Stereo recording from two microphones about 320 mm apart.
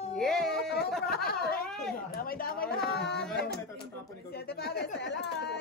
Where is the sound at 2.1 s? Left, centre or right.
Left.